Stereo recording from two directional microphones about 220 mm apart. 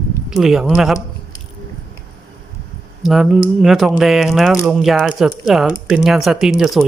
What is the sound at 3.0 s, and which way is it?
Speech, centre (ahead or behind).